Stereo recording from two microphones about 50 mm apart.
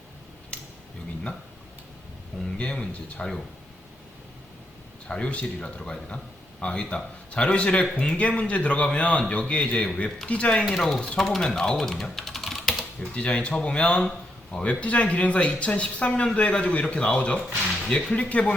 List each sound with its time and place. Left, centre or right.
0.5 s a sound: left
2.6 s speech: left
5.0 s speech: left
10.6 s speech: centre
13.0 s speech: left